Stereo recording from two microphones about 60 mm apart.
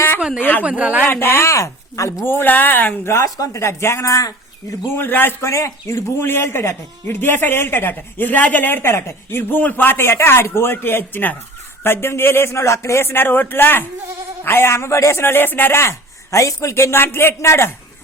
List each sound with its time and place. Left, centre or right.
0.2 s a sound: centre
0.6 s speech: right
1.0 s speech: left
1.3 s speech: left
2.2 s speech: left
3.2 s speech: left
3.6 s speech: left
4.0 s speech: left
4.9 s speech: left
5.5 s speech: left
6.2 s speech: left